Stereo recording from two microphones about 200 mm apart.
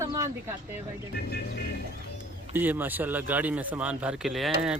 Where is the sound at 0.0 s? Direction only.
15° right (ahead or behind).